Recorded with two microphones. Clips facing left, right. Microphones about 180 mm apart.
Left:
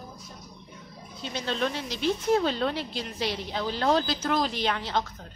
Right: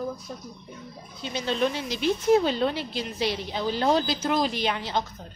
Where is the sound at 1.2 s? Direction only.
5° right (ahead or behind).